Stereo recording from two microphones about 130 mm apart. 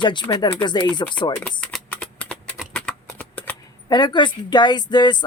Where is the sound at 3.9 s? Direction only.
35° left (ahead or behind).